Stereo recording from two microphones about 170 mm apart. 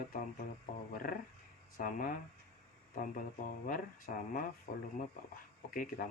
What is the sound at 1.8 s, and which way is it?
Speech, 55° left (ahead or behind).